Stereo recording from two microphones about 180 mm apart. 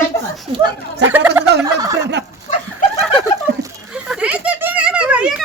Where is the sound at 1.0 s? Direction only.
10° right (ahead or behind).